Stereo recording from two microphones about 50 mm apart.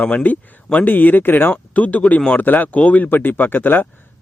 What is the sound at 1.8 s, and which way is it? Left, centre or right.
Speech, left.